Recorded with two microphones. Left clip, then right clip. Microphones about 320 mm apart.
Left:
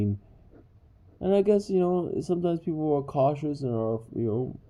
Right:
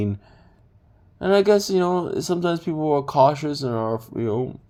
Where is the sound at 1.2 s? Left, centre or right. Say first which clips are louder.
Right 6 dB; centre.